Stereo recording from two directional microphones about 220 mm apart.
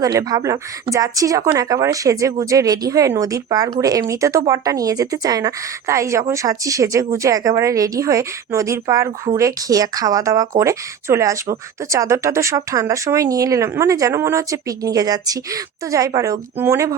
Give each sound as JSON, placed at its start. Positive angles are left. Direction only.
{"t": 0.0, "sound": "speech", "side_deg": -15}